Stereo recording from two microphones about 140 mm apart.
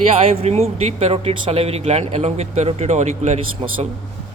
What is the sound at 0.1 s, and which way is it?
Speech, 45° right (ahead or behind).